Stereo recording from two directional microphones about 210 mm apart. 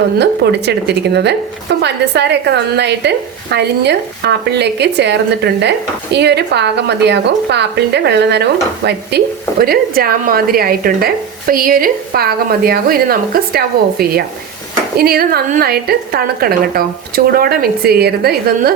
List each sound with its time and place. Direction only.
0.2 s a woman's voice: 55° right (ahead or behind)